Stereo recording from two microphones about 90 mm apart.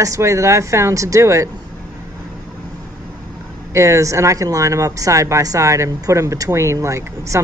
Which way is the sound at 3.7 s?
35° right (ahead or behind).